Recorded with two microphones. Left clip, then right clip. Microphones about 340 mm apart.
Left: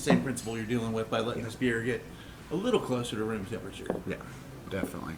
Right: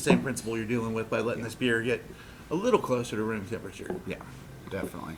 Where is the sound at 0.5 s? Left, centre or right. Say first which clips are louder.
Right 2 dB; right.